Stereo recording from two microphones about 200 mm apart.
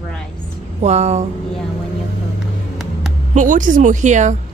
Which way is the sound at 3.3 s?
40° right (ahead or behind).